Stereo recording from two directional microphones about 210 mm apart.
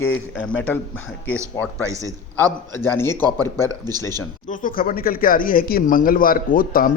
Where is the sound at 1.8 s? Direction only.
15° right (ahead or behind).